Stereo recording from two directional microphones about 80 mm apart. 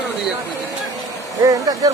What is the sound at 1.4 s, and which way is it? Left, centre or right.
Speech, right.